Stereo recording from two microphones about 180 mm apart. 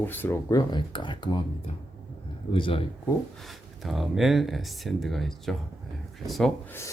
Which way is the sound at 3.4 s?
Centre (ahead or behind).